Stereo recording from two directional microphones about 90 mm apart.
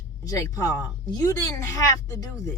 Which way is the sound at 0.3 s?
40° left (ahead or behind).